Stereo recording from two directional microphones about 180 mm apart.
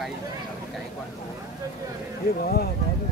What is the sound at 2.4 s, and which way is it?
Speech, 60° left (ahead or behind).